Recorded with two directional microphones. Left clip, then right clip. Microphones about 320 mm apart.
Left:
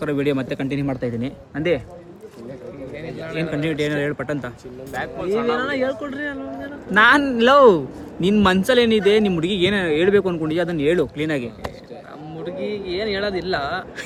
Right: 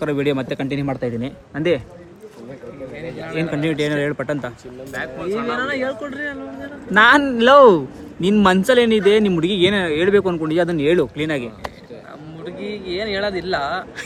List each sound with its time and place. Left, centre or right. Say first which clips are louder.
0.0 s speech: right 1 dB; centre
3.0 s speech: right 2 dB; centre
4.9 s speech: even; left
5.3 s a man's voice: left 1 dB; centre